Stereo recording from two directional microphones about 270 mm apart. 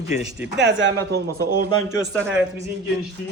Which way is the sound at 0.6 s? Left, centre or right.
Right.